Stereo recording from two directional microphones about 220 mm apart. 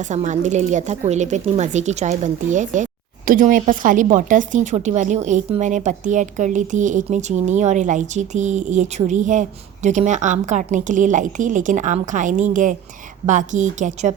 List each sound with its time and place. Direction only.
0.0 s speech: 35° right (ahead or behind)